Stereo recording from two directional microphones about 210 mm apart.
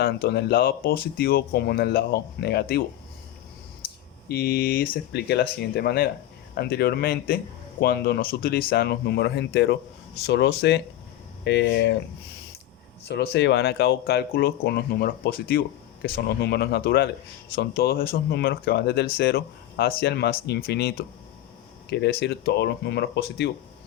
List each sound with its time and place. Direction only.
0.0 s speech: 50° left (ahead or behind)
4.3 s speech: 45° left (ahead or behind)
13.1 s speech: 55° left (ahead or behind)